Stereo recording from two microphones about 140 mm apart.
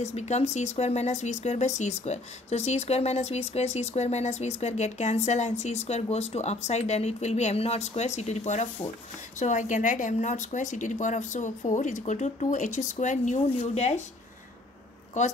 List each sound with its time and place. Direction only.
0.0 s a woman's voice: 50° left (ahead or behind)